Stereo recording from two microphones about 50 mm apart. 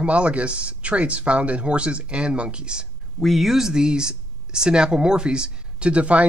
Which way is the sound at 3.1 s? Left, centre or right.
Centre.